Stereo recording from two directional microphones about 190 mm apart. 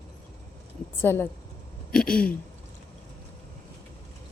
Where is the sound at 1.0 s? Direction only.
10° left (ahead or behind).